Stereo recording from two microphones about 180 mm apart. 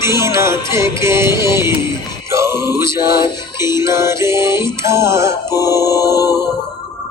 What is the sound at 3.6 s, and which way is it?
Music, 15° right (ahead or behind).